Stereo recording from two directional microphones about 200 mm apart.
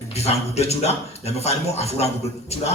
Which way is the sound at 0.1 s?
30° left (ahead or behind).